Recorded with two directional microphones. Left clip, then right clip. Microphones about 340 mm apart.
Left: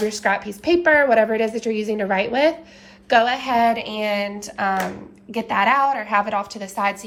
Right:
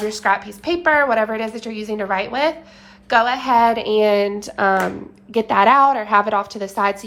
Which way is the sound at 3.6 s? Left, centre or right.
Right.